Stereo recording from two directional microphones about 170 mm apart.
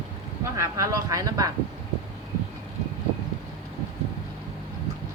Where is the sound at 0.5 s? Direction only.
20° right (ahead or behind).